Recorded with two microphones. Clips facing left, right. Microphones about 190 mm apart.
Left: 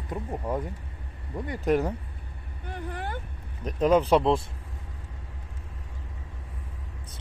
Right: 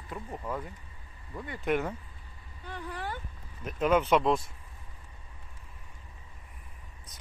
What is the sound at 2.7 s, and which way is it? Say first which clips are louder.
Speech: left 3 dB; 50° left (ahead or behind).